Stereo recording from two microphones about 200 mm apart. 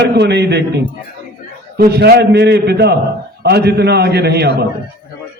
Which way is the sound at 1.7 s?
55° right (ahead or behind).